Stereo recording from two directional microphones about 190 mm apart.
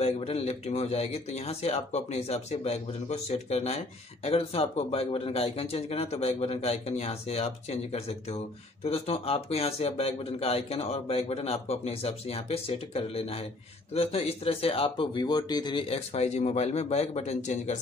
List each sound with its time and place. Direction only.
0.0 s speech: 35° left (ahead or behind)